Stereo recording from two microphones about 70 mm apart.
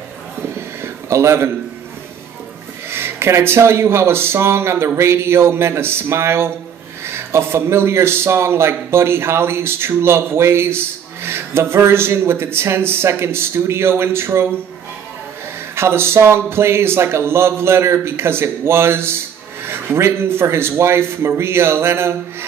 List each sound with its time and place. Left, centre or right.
0.8 s a sound: right
2.9 s a man's voice: right
15.7 s a man's voice: right